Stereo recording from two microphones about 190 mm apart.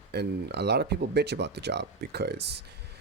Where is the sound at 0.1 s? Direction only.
60° right (ahead or behind).